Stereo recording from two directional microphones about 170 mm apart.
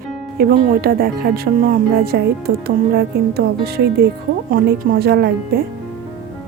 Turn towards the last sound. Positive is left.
turn(degrees=-70)  # may be behind; listen again after turning